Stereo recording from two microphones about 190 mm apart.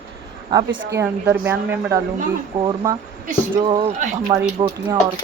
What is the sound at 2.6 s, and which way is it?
Speech, 20° right (ahead or behind).